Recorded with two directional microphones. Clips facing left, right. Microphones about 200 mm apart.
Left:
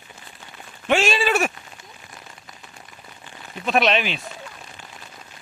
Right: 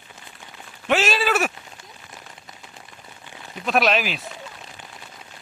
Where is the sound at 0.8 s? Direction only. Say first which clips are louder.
Left 1 dB; centre (ahead or behind).